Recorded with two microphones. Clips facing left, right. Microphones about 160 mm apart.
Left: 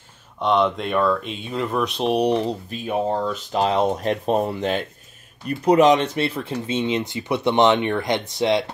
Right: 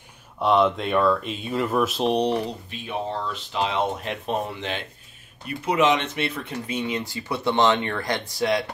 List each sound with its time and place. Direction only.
0.4 s speech: centre (ahead or behind)
2.4 s speech: 45° left (ahead or behind); by 8.6 s 25° left (ahead or behind)